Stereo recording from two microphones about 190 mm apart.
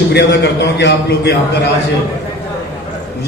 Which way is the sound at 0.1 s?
65° left (ahead or behind).